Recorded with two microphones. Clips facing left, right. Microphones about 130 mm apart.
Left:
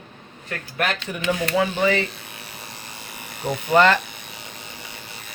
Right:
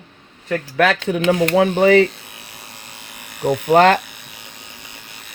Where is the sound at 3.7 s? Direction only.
55° right (ahead or behind).